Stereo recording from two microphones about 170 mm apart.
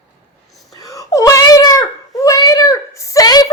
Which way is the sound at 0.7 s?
20° left (ahead or behind).